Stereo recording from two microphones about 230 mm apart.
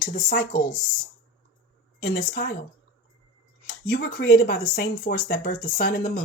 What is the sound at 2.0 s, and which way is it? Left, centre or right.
Speech, left.